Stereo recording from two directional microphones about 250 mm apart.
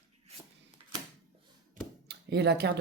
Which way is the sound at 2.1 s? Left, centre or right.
Right.